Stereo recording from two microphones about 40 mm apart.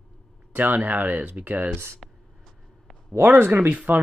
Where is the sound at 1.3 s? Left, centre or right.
Right.